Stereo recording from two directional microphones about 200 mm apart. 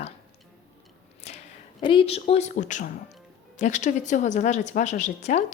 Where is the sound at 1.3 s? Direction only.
35° left (ahead or behind).